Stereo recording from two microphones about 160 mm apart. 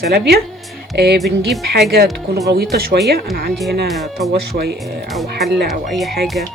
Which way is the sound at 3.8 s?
Centre (ahead or behind).